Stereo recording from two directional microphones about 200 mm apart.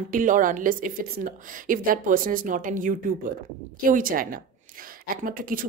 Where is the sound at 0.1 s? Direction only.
40° right (ahead or behind).